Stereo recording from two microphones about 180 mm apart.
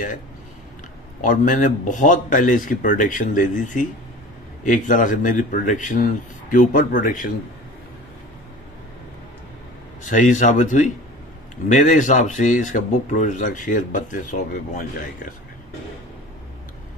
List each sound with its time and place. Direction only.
1.2 s speech: 45° left (ahead or behind)
10.0 s speech: 45° left (ahead or behind)